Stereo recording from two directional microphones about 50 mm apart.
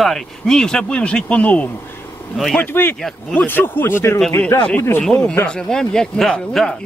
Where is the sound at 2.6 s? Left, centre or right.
Left.